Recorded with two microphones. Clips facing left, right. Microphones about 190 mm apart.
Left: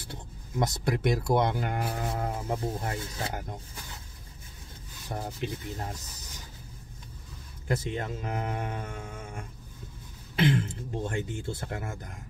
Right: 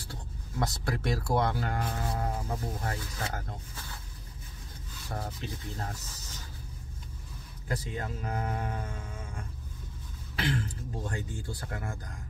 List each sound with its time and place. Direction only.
0.0 s speech: 20° left (ahead or behind)
5.0 s speech: 20° left (ahead or behind)
7.6 s speech: 25° left (ahead or behind)